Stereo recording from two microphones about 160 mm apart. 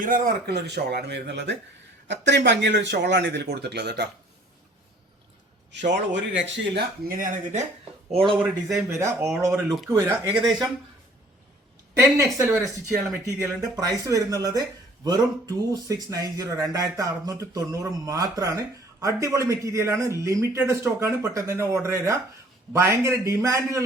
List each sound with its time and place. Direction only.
0.0 s speech: 75° right (ahead or behind); by 4.0 s 90° right
5.7 s speech: 90° right
6.7 s speech: 60° right (ahead or behind)
8.4 s a man's voice: 15° right (ahead or behind)
11.9 s a man's voice: 20° right (ahead or behind)